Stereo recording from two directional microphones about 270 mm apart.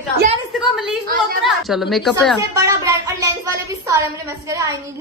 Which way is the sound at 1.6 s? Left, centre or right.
Centre.